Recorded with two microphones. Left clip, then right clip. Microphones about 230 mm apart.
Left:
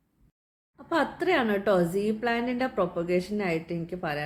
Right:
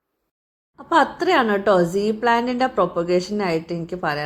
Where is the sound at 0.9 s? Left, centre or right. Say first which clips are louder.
Right 8 dB; centre.